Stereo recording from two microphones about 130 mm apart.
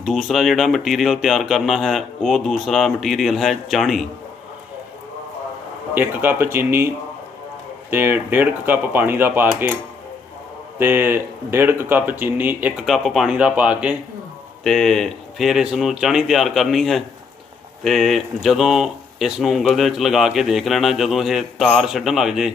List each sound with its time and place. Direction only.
0.0 s speech: centre (ahead or behind)
5.9 s speech: 15° right (ahead or behind)
10.8 s speech: 15° right (ahead or behind)
12.8 s speech: centre (ahead or behind)
14.6 s speech: 5° left (ahead or behind)